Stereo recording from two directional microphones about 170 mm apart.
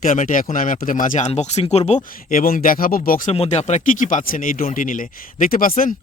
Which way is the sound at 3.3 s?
40° left (ahead or behind).